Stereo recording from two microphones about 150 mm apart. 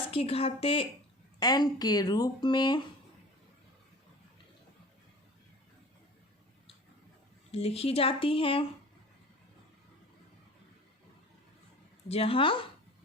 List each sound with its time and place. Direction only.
0.1 s speech: 40° left (ahead or behind)
1.4 s speech: 25° left (ahead or behind)
7.5 s speech: 45° left (ahead or behind)
12.0 s speech: 40° left (ahead or behind)